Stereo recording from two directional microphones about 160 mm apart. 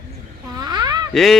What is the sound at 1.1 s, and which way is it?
Speech, centre (ahead or behind).